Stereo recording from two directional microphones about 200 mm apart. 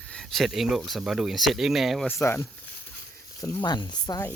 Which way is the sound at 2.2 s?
15° left (ahead or behind).